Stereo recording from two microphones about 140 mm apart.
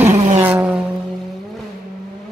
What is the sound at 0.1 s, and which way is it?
Vehicle, 55° right (ahead or behind).